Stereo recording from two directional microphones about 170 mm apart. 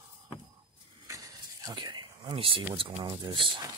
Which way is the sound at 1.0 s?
20° right (ahead or behind).